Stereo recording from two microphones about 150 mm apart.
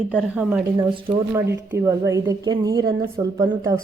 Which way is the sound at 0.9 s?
35° right (ahead or behind).